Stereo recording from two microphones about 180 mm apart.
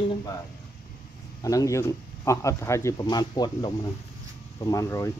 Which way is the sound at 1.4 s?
20° left (ahead or behind).